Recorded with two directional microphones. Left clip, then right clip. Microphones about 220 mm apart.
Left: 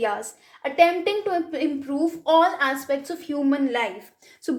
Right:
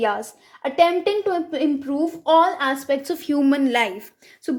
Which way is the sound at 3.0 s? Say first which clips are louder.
Right 5 dB; 45° right (ahead or behind).